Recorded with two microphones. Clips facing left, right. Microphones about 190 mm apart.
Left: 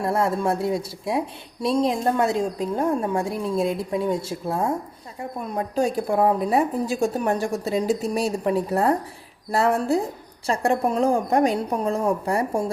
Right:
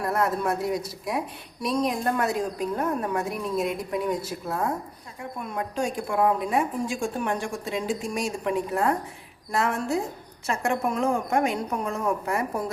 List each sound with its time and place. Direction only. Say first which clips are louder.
0.0 s a woman's voice: left 3 dB; 25° left (ahead or behind)